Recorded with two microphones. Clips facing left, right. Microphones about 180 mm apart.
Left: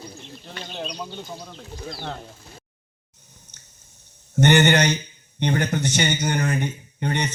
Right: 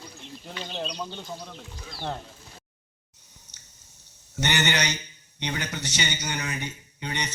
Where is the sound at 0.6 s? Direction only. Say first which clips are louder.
Left 1 dB; 5° left (ahead or behind).